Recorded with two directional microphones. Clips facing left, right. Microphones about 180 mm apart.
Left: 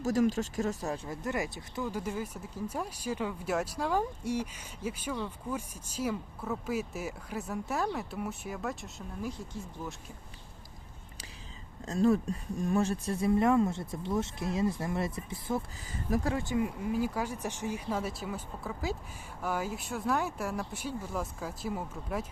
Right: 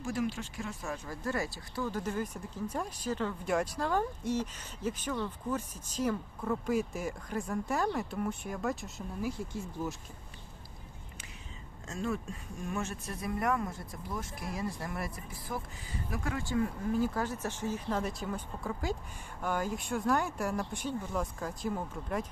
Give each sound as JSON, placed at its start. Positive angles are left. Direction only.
{"t": 0.0, "sound": "speech", "side_deg": 40}
{"t": 1.0, "sound": "speech", "side_deg": 20}
{"t": 11.9, "sound": "speech", "side_deg": 35}
{"t": 16.0, "sound": "speech", "side_deg": 40}
{"t": 16.3, "sound": "speech", "side_deg": 20}